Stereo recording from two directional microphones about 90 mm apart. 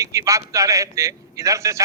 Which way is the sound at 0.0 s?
35° right (ahead or behind).